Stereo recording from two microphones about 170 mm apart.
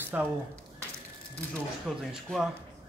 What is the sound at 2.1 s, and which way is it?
Speech, centre (ahead or behind).